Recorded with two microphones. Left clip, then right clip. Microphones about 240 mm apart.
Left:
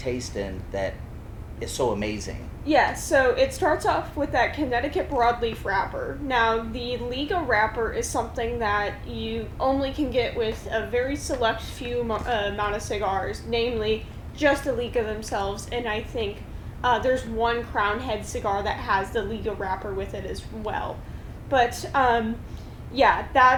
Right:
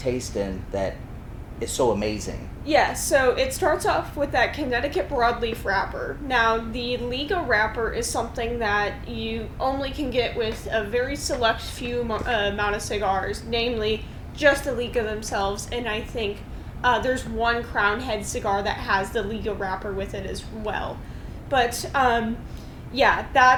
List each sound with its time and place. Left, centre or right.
0.0 s speech: right
2.6 s a woman's voice: left